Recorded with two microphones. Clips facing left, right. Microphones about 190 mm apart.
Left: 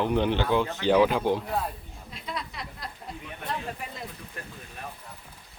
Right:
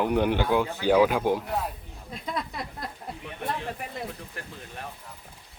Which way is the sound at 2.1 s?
45° right (ahead or behind).